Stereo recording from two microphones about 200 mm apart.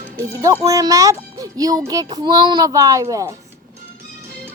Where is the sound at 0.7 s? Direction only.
15° right (ahead or behind).